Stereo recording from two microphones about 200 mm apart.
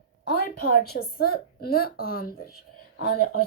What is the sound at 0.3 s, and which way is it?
Speech, 50° left (ahead or behind).